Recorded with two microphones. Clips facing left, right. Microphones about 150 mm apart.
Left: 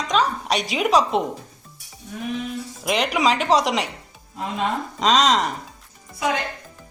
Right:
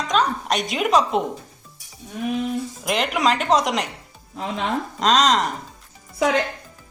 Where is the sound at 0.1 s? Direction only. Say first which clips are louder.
Even; centre (ahead or behind).